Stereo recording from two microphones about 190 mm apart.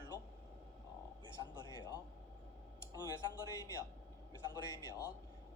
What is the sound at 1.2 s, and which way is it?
Speech, 20° right (ahead or behind).